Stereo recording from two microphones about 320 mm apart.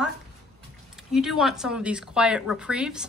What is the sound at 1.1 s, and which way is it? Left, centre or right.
Speech, centre.